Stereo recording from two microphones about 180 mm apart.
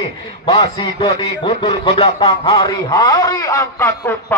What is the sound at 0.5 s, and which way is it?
A man's voice, 25° left (ahead or behind).